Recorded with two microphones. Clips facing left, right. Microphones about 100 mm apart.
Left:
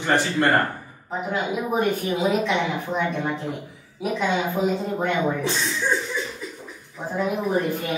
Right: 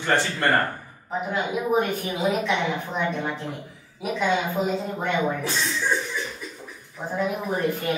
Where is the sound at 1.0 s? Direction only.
Centre (ahead or behind).